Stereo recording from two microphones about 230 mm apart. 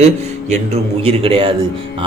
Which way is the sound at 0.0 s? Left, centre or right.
Right.